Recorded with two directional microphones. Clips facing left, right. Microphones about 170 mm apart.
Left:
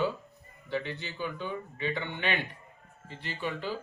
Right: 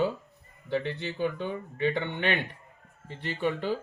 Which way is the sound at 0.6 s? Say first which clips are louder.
Right 4 dB; 60° right (ahead or behind).